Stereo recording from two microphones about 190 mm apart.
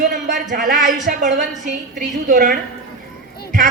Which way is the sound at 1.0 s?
45° right (ahead or behind).